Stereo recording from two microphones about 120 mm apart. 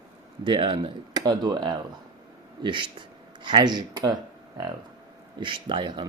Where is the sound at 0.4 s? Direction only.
45° right (ahead or behind).